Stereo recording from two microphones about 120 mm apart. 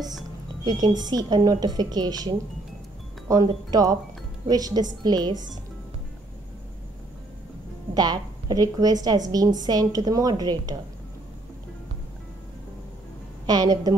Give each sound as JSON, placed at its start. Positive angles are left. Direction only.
{"t": 0.7, "sound": "a woman's voice", "side_deg": -35}
{"t": 3.7, "sound": "a woman's voice", "side_deg": -30}
{"t": 7.9, "sound": "a woman's voice", "side_deg": -35}
{"t": 13.5, "sound": "a woman's voice", "side_deg": -30}